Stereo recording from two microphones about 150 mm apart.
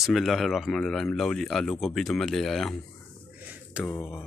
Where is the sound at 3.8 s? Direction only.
15° left (ahead or behind).